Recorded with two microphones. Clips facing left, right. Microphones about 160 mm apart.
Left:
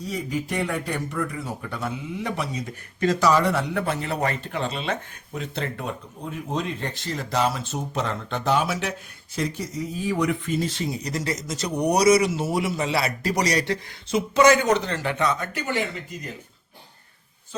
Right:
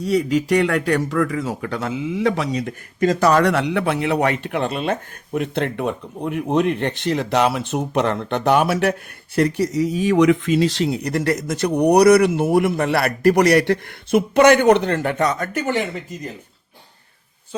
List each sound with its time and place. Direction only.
0.0 s speech: 70° right (ahead or behind)
3.2 s a man's voice: 65° right (ahead or behind)